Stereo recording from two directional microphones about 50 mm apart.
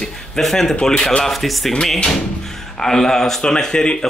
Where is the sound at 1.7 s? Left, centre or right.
Centre.